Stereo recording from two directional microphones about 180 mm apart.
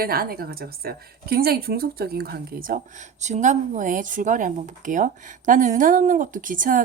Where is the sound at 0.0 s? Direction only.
55° right (ahead or behind).